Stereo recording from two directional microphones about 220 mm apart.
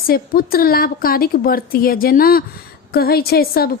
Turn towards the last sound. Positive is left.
turn(degrees=45)  # may be behind; listen again after turning